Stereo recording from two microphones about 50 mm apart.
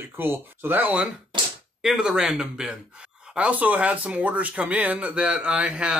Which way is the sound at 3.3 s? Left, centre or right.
Right.